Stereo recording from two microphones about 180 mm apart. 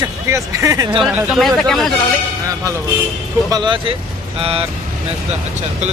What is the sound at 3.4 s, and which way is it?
Speech, 25° right (ahead or behind).